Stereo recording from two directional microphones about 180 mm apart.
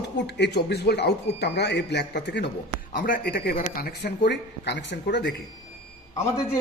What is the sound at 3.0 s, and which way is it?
Speech, 50° left (ahead or behind).